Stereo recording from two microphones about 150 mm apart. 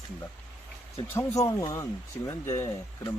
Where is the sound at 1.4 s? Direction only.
25° left (ahead or behind).